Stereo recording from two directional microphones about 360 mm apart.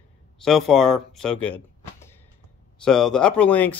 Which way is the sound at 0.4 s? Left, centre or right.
Centre.